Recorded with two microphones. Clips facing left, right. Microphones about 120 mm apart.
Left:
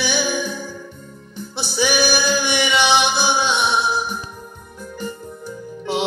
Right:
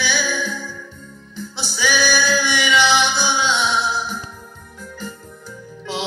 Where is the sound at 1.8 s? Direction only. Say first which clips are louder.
Left 1 dB; 15° left (ahead or behind).